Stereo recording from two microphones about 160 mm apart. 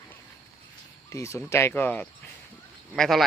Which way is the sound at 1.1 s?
15° left (ahead or behind).